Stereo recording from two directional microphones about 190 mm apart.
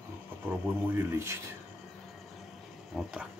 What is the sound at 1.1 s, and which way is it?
Speech, 15° right (ahead or behind).